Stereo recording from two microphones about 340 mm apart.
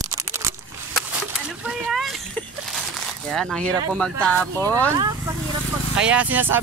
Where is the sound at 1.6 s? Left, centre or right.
Centre.